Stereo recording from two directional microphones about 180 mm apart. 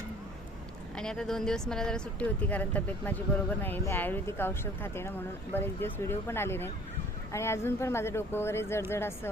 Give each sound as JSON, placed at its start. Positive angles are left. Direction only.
{"t": 0.9, "sound": "speech", "side_deg": 5}